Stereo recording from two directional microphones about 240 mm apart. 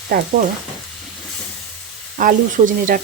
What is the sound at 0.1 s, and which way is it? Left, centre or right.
Speech, right.